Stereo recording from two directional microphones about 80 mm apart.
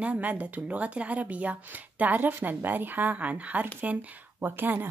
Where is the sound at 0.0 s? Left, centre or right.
Centre.